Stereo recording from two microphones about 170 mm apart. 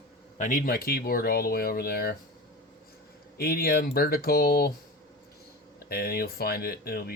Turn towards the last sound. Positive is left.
turn(degrees=65)  # may be behind; listen again after turning